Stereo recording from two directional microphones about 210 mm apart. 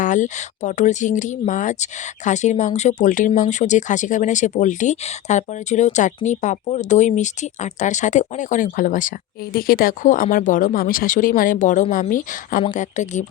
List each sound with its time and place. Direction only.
0.0 s speech: 35° left (ahead or behind)